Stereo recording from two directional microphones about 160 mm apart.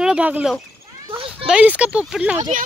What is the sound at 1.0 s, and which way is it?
Children playing, 35° right (ahead or behind).